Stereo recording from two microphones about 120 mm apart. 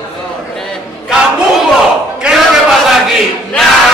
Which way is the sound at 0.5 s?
5° left (ahead or behind).